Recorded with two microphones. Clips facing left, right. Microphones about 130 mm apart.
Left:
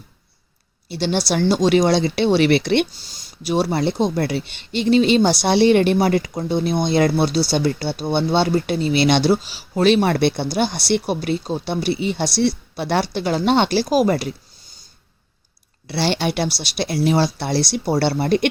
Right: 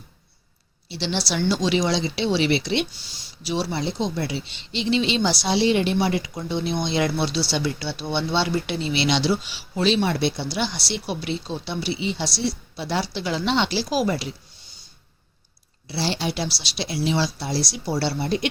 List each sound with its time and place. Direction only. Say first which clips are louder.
0.9 s speech: left 6 dB; 50° left (ahead or behind)
2.9 s speech: left 2 dB; 40° left (ahead or behind)
15.9 s speech: left 5 dB; 65° left (ahead or behind)